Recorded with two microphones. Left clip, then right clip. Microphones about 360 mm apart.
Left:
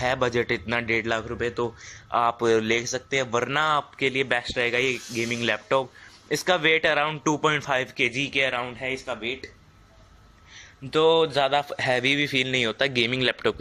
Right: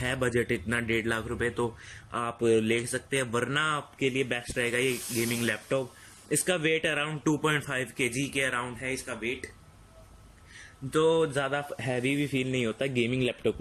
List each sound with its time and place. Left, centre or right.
0.0 s speech: centre
10.9 s speech: centre
12.1 s speech: left